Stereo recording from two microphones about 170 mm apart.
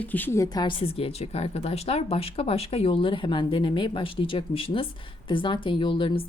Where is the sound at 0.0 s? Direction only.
10° left (ahead or behind).